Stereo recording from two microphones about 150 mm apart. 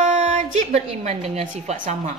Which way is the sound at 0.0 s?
50° right (ahead or behind).